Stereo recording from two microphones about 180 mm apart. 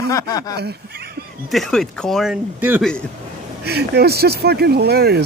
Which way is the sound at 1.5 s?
Centre (ahead or behind).